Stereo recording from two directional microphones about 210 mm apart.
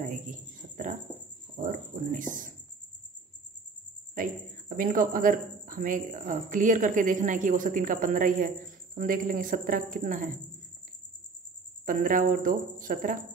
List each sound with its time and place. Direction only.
0.0 s cricket: 40° right (ahead or behind)
1.6 s a sound: 40° right (ahead or behind)
4.1 s speech: 40° right (ahead or behind)
11.8 s speech: 40° right (ahead or behind)